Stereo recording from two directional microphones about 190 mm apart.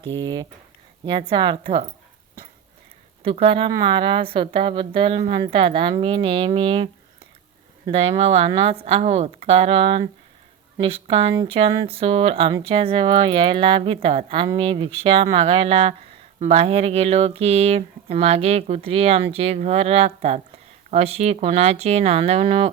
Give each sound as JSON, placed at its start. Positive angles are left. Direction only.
{"t": 0.2, "sound": "speech", "side_deg": -20}
{"t": 3.2, "sound": "speech", "side_deg": -30}